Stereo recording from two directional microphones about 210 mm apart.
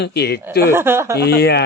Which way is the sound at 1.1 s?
50° left (ahead or behind).